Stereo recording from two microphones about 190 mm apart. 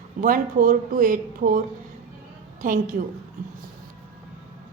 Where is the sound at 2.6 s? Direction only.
45° right (ahead or behind).